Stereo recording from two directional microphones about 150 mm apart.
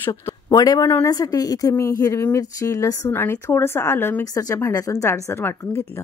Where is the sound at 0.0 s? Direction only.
25° left (ahead or behind).